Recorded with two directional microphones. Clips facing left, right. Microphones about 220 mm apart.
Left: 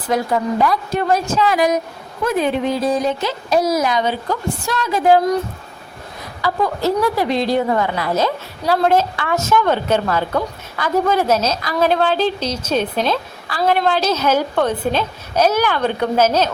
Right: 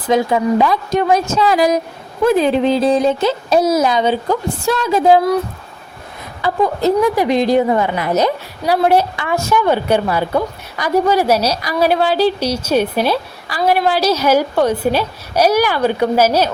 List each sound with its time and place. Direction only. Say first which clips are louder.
0.1 s speech: right 4 dB; 20° right (ahead or behind)
1.4 s speech: right 2 dB; 35° right (ahead or behind)
6.4 s a woman's voice: right 3 dB; 15° right (ahead or behind)